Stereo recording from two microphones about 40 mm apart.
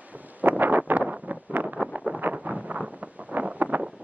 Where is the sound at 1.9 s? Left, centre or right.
Right.